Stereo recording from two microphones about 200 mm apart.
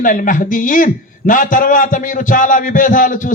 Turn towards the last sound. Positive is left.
turn(degrees=40)  # may be behind; listen again after turning